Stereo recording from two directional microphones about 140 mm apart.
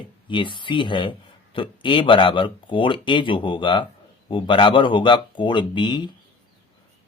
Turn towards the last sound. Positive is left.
turn(degrees=35)  # may be behind; listen again after turning